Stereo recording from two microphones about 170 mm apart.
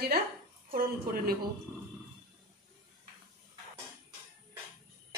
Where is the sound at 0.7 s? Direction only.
60° right (ahead or behind).